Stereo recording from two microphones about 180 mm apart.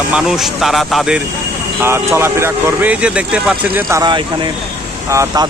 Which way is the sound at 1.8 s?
15° right (ahead or behind).